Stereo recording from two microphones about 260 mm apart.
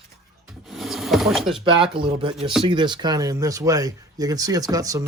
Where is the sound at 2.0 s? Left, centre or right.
Centre.